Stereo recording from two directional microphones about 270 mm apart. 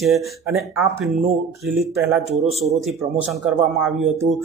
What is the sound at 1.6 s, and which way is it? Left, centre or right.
Speech, centre.